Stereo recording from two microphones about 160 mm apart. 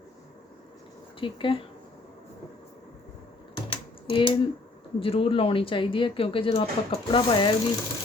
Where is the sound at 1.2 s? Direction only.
35° left (ahead or behind).